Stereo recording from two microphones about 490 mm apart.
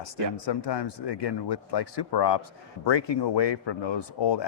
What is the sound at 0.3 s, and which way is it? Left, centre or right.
Speech, left.